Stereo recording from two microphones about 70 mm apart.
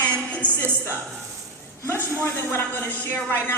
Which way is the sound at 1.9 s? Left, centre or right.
Left.